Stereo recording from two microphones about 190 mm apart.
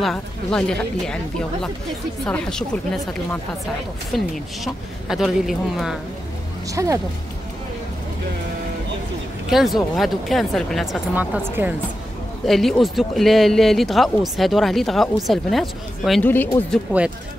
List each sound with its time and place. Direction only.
0.0 s speech: 5° left (ahead or behind)
6.7 s speech: 15° right (ahead or behind)
9.5 s speech: centre (ahead or behind)